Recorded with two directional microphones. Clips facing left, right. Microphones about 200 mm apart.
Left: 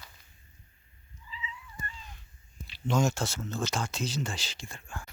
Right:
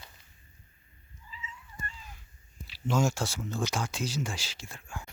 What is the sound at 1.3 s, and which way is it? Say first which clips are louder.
Cat: left 3 dB; 45° right (ahead or behind).